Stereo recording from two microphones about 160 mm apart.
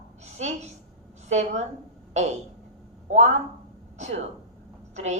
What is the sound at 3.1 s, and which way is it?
A woman's voice, 45° right (ahead or behind).